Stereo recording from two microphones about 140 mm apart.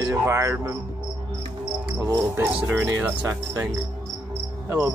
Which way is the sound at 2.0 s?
20° right (ahead or behind).